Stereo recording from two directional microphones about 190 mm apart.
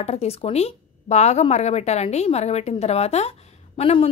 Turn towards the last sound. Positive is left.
turn(degrees=30)  # may be behind; listen again after turning